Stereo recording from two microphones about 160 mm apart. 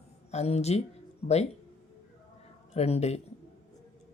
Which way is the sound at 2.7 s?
40° left (ahead or behind).